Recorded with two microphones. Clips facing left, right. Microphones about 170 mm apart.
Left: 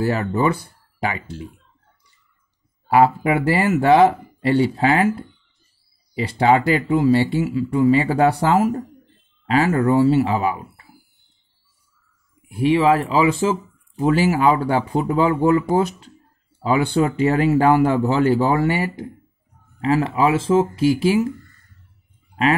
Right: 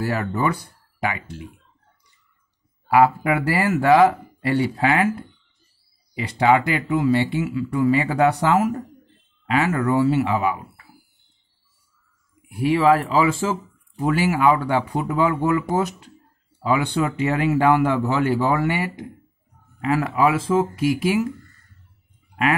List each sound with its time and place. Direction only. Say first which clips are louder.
0.0 s speech: left 3 dB; 25° left (ahead or behind)
2.9 s speech: left 1 dB; 25° left (ahead or behind)
12.4 s speech: left 1 dB; 25° left (ahead or behind)